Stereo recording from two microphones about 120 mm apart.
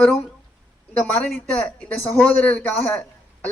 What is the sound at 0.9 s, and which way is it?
A man's voice, 15° left (ahead or behind).